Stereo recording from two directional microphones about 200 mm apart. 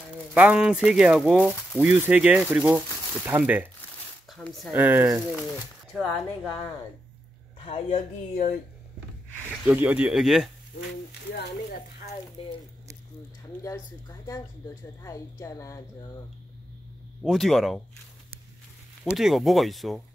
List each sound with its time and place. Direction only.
0.3 s speech: 5° right (ahead or behind)
4.3 s speech: centre (ahead or behind)
5.9 s speech: 5° left (ahead or behind)
7.5 s speech: 25° left (ahead or behind)
9.7 s speech: 5° right (ahead or behind)
12.4 s speech: 30° left (ahead or behind)
15.0 s a woman's voice: 15° left (ahead or behind)
17.2 s speech: centre (ahead or behind)
19.1 s speech: centre (ahead or behind)